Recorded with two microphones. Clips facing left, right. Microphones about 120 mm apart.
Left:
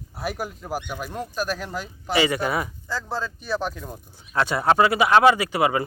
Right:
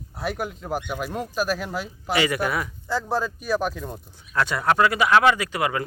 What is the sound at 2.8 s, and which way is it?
A man's voice, 15° right (ahead or behind).